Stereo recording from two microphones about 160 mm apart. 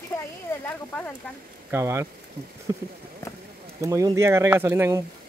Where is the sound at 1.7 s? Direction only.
15° right (ahead or behind).